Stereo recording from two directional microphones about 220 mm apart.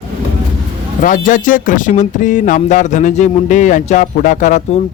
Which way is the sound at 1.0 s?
35° left (ahead or behind).